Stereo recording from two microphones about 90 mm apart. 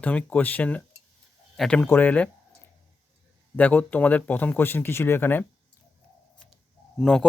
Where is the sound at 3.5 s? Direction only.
20° left (ahead or behind).